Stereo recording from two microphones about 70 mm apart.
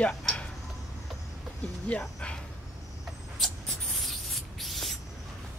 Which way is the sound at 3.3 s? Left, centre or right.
Centre.